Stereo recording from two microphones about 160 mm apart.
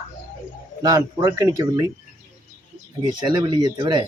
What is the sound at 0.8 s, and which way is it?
Speech, 20° right (ahead or behind).